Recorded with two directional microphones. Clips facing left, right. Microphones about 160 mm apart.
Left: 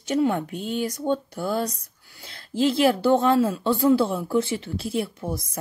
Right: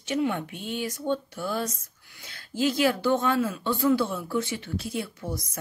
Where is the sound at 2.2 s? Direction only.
30° left (ahead or behind).